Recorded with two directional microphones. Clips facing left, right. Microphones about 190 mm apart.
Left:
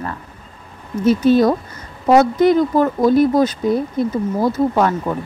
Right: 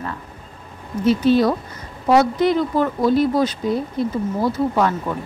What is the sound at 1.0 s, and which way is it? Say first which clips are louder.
A woman's voice: left 3 dB; 50° left (ahead or behind).